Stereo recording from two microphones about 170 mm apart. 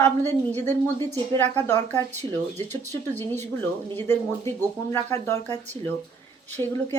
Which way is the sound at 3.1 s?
10° left (ahead or behind).